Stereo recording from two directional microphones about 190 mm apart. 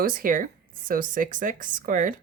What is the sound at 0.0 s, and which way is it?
A woman's voice, 45° right (ahead or behind).